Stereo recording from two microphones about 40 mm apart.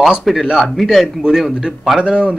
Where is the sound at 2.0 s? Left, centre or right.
Right.